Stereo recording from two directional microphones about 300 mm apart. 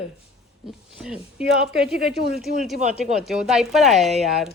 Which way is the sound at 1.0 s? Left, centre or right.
Centre.